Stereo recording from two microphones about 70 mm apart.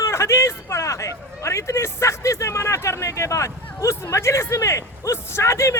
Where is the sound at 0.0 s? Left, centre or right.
Left.